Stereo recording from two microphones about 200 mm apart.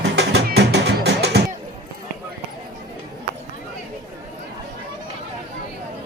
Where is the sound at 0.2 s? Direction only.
55° right (ahead or behind).